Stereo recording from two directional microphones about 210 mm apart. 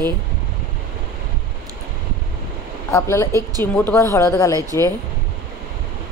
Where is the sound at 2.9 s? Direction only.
15° left (ahead or behind).